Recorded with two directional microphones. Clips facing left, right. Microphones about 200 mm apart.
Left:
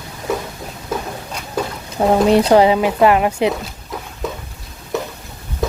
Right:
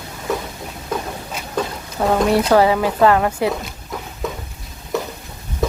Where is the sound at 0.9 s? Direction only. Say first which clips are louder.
Left 1 dB; 5° left (ahead or behind).